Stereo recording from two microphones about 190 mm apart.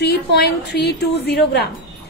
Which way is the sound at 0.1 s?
60° left (ahead or behind).